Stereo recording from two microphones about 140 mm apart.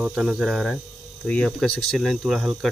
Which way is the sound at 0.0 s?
5° right (ahead or behind).